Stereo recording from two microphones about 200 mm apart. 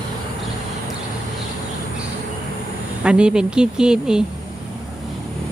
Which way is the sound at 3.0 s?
5° right (ahead or behind).